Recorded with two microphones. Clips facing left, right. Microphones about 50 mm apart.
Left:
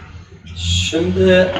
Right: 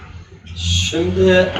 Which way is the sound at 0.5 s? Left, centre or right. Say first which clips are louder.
Left 1 dB; centre.